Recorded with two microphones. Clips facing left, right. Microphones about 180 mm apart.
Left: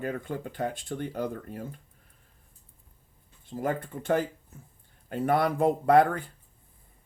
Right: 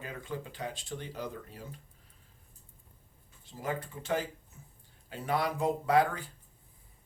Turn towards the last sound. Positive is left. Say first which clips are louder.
# left 6 dB
turn(degrees=55)  # may be behind; listen again after turning